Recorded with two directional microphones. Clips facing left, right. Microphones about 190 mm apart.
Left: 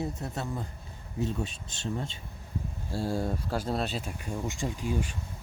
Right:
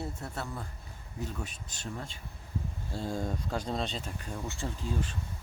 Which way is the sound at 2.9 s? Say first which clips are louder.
Left 4 dB; 10° left (ahead or behind).